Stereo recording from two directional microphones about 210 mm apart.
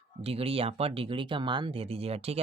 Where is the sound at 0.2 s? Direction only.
30° right (ahead or behind).